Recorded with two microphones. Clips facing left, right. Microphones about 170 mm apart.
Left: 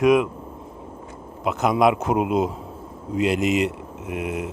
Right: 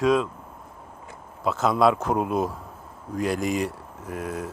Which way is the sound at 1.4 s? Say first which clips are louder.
Left 2 dB; 20° left (ahead or behind).